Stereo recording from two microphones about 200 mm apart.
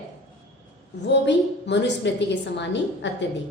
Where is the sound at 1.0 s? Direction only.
60° left (ahead or behind).